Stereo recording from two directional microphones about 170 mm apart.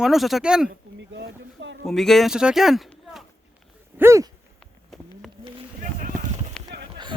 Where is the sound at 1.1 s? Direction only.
90° right.